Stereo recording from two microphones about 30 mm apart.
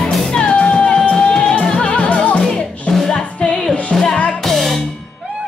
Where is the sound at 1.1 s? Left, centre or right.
Left.